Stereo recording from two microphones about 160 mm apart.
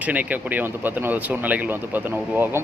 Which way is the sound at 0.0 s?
10° right (ahead or behind).